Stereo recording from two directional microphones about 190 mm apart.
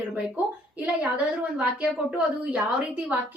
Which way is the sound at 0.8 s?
5° right (ahead or behind).